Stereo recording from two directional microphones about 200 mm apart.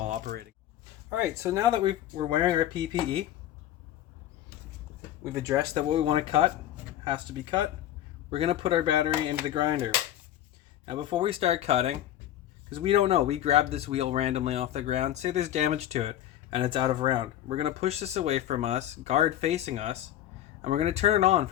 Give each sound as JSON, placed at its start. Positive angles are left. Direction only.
{"t": 0.0, "sound": "a sound", "side_deg": -35}
{"t": 1.1, "sound": "speech", "side_deg": -15}
{"t": 5.2, "sound": "speech", "side_deg": -15}
{"t": 5.9, "sound": "speech", "side_deg": -30}